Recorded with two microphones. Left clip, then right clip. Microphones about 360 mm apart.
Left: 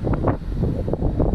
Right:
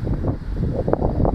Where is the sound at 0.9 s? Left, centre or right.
Right.